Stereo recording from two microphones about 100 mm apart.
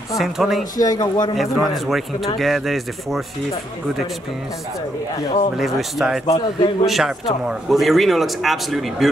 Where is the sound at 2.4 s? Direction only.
Centre (ahead or behind).